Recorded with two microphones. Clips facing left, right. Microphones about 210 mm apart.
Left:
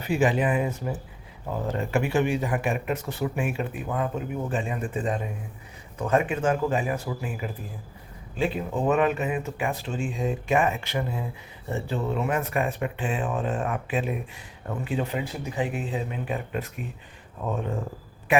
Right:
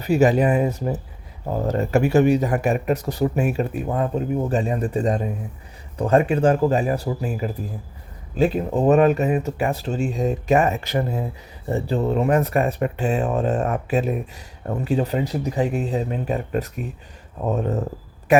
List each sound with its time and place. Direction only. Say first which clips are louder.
0.0 s a man's voice: right 6 dB; 40° right (ahead or behind)